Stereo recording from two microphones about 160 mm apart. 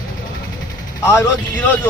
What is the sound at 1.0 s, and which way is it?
Speech, 20° left (ahead or behind).